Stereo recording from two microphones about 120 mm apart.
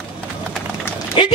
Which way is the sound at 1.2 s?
45° left (ahead or behind).